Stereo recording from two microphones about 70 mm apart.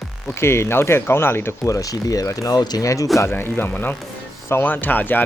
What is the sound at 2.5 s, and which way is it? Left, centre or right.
Speech, left.